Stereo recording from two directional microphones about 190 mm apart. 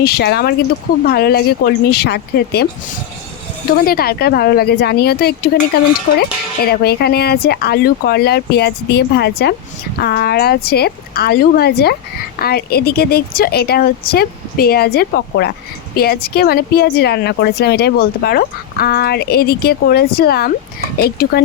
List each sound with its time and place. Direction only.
0.0 s speech: 60° left (ahead or behind)
3.8 s speech: 55° left (ahead or behind)